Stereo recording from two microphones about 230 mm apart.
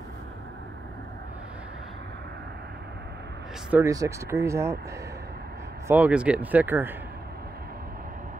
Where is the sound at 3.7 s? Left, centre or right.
Centre.